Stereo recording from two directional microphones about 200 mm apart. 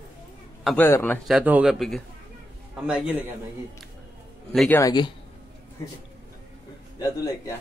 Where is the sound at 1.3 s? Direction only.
5° right (ahead or behind).